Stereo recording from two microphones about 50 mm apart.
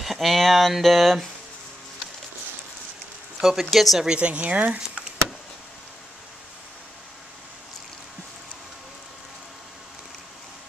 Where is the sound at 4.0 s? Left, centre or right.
Centre.